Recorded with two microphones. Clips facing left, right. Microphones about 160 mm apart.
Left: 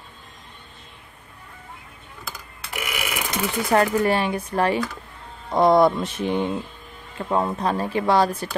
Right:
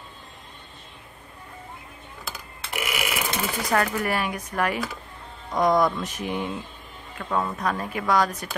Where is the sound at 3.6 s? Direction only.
25° left (ahead or behind).